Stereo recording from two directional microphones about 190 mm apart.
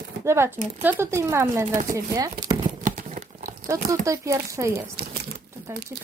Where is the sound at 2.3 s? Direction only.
40° right (ahead or behind).